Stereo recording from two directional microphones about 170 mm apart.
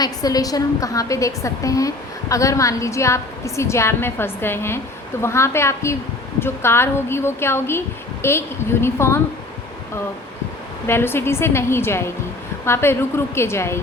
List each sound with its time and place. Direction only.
0.0 s a woman's voice: 20° left (ahead or behind)
10.8 s speech: 15° left (ahead or behind)